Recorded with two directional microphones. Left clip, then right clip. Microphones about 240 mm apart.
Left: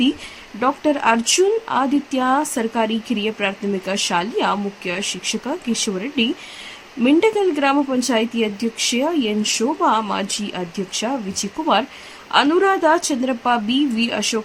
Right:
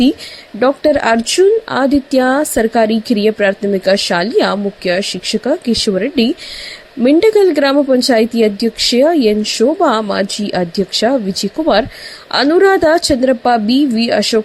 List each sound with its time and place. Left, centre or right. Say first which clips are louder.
0.6 s speech: right 6 dB; centre
11.6 s speech: right 6 dB; right